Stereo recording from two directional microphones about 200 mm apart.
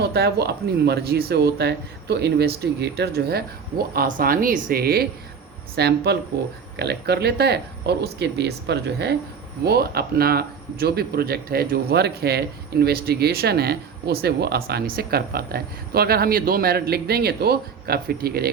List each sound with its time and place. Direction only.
0.0 s speech: 55° right (ahead or behind)